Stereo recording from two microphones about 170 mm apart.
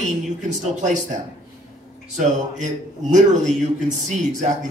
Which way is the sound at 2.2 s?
45° right (ahead or behind).